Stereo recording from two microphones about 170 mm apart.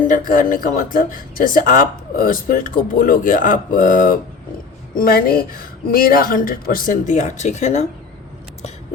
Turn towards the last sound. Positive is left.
turn(degrees=40)  # may be behind; listen again after turning